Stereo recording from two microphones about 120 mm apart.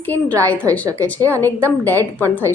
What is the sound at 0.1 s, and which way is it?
Speech, 15° left (ahead or behind).